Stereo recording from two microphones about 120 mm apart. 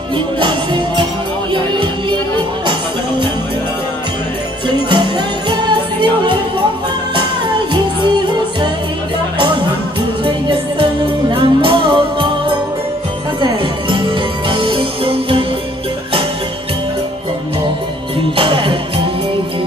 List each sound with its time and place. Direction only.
0.4 s music: 40° right (ahead or behind)
4.6 s music: 40° right (ahead or behind)
10.8 s music: 45° right (ahead or behind)
18.3 s music: 45° right (ahead or behind)